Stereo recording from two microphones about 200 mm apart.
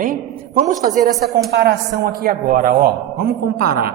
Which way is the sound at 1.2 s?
50° right (ahead or behind).